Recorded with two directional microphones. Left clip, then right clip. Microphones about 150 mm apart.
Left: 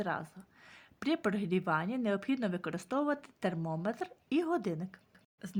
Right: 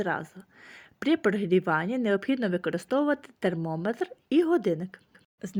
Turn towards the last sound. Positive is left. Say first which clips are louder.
# right 7 dB
turn(degrees=-25)  # may be behind; listen again after turning